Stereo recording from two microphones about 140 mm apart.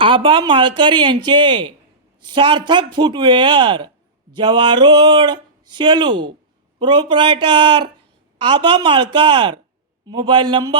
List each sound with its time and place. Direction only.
0.0 s speech: 35° right (ahead or behind)